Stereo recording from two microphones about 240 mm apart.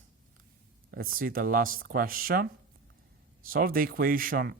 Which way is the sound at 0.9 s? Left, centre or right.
Right.